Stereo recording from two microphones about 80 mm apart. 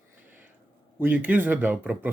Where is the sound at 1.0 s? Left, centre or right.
Right.